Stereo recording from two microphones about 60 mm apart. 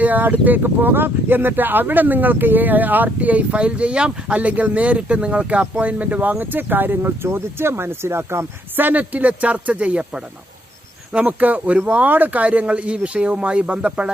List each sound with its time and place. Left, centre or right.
0.0 s speech: right
8.7 s speech: right